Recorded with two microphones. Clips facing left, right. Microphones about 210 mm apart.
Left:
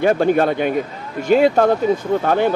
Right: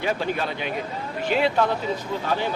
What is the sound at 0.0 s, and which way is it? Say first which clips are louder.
Speech: left 11 dB; 50° left (ahead or behind).